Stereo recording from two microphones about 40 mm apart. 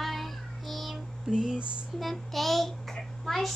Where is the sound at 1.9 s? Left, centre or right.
Centre.